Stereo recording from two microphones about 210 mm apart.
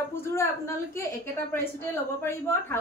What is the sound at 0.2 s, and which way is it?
A woman's voice, 10° left (ahead or behind).